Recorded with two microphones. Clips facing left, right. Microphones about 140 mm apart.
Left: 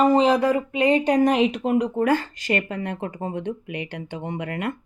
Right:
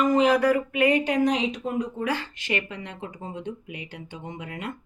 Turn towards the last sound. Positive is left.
turn(degrees=65)  # may be behind; listen again after turning